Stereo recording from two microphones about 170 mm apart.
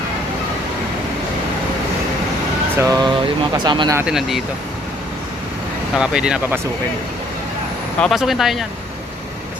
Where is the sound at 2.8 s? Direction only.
20° right (ahead or behind).